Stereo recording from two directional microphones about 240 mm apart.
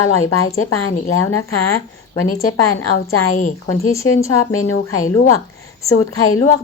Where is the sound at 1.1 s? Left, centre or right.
Left.